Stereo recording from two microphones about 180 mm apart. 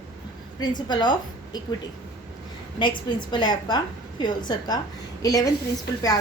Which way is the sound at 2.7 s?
25° left (ahead or behind).